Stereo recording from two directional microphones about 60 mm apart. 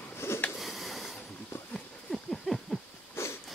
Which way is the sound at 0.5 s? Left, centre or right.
Centre.